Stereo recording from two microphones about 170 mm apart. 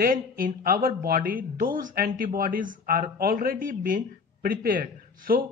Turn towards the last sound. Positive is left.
turn(degrees=-55)  # may be behind; listen again after turning